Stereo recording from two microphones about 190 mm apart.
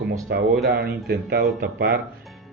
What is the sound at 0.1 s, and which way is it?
Speech, 60° right (ahead or behind).